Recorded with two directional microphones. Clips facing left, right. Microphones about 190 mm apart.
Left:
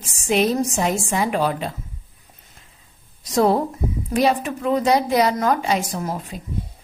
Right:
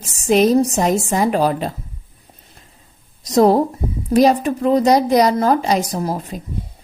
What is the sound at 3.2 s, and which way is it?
Speech, 40° right (ahead or behind).